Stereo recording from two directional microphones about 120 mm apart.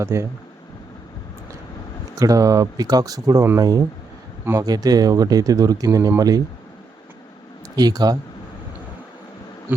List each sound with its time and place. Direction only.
0.0 s speech: 25° right (ahead or behind)
2.1 s speech: 30° right (ahead or behind)
7.8 s speech: 35° right (ahead or behind)
9.7 s insect: 15° right (ahead or behind)